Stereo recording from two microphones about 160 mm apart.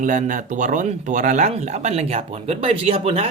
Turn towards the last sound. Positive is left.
turn(degrees=-40)  # may be behind; listen again after turning